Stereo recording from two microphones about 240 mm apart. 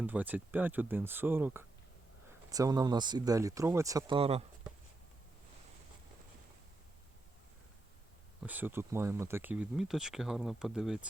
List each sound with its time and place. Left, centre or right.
0.0 s speech: centre; by 4.4 s right
8.4 s speech: centre